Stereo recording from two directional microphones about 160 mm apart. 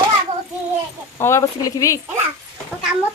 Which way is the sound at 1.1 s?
20° left (ahead or behind).